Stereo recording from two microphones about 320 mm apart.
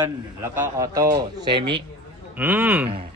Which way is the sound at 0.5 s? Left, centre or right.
Centre.